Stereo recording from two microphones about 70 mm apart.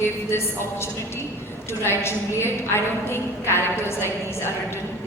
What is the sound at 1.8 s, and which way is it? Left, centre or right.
A woman's voice, left.